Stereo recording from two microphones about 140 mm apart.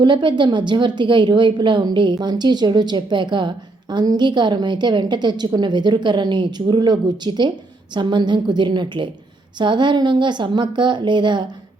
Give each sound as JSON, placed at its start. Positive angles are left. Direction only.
{"t": 0.0, "sound": "a woman's voice", "side_deg": -35}